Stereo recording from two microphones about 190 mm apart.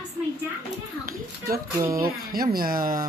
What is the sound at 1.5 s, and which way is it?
Speech, 50° right (ahead or behind).